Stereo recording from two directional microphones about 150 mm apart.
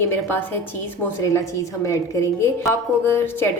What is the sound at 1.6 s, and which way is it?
A woman's voice, 20° left (ahead or behind).